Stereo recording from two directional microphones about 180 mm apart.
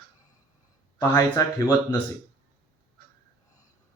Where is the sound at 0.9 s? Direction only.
15° left (ahead or behind).